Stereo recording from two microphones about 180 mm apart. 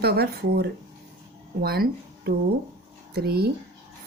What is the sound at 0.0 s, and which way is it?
Speech, 60° right (ahead or behind).